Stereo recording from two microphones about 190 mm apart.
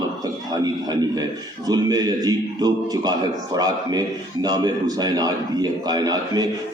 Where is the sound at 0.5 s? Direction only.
20° right (ahead or behind).